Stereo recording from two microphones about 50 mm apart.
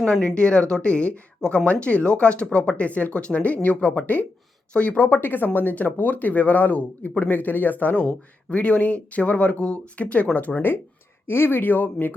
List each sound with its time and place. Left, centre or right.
0.2 s speech: left
5.0 s speech: left
8.0 s speech: left
11.3 s speech: left